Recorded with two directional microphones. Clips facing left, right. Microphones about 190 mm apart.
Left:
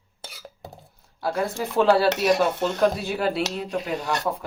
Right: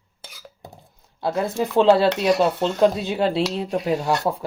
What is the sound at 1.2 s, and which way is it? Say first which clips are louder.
Speech: right 3 dB; 20° right (ahead or behind).